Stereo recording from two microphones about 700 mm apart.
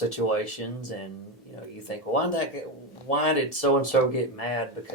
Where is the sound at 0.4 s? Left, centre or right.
Left.